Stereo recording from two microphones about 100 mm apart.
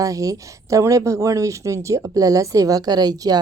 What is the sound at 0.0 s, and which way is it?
Speech, 35° right (ahead or behind).